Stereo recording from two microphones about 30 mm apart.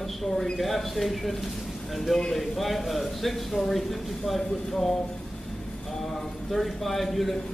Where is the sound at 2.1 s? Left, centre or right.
Centre.